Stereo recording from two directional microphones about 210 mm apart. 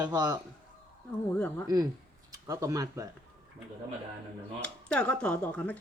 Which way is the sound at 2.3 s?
15° right (ahead or behind).